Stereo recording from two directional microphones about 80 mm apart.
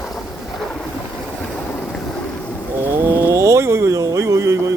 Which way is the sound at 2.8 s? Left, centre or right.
Right.